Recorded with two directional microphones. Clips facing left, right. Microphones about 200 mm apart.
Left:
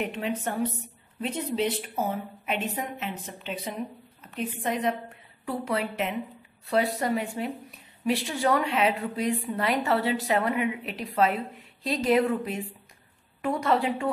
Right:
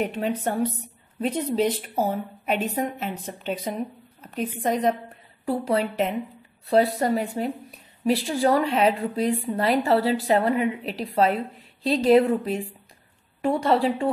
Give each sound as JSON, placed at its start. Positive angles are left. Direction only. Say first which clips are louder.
{"t": 0.0, "sound": "a woman's voice", "louder": "right 4 dB", "side_deg": -40}